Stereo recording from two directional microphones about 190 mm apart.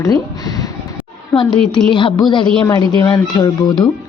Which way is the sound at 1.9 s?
25° left (ahead or behind).